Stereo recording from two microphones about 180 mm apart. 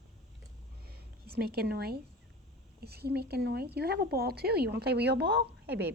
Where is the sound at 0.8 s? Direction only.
60° right (ahead or behind).